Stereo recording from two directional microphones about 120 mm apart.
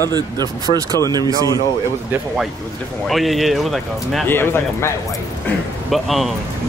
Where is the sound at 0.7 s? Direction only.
65° left (ahead or behind).